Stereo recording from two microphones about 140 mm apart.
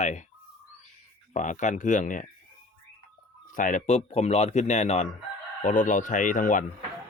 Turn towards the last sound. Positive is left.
turn(degrees=70)  # may be behind; listen again after turning